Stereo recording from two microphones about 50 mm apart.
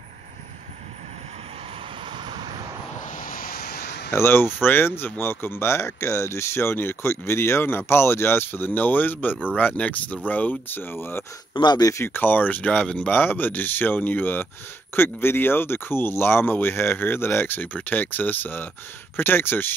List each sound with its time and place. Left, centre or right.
4.1 s speech: left
10.8 s speech: left
12.1 s speech: left
13.1 s speech: left